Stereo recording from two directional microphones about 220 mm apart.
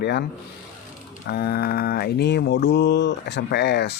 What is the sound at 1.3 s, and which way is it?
Mantra, 45° left (ahead or behind).